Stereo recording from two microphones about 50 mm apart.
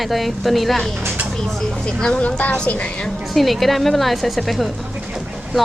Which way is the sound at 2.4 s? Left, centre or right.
Left.